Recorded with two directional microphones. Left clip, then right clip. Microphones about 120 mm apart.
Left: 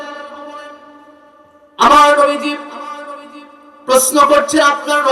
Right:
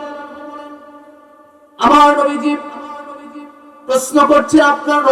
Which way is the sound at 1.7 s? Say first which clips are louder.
Left 1 dB; 40° left (ahead or behind).